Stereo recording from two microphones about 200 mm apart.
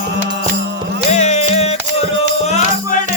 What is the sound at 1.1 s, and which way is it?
Music, 35° left (ahead or behind).